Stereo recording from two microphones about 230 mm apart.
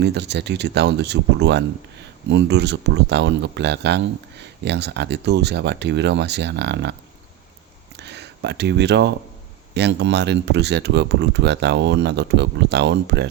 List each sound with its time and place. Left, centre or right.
0.0 s speech: right
7.9 s a sound: right
9.7 s speech: right